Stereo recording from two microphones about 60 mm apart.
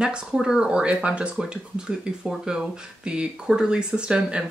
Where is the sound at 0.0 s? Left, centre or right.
Centre.